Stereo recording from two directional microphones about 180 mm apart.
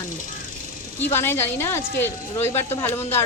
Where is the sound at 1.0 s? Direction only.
10° left (ahead or behind).